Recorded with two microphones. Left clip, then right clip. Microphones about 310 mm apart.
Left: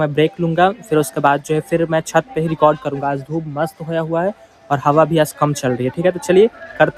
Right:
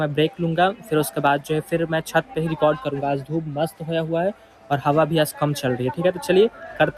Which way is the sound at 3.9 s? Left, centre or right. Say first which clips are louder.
Left 4 dB; left.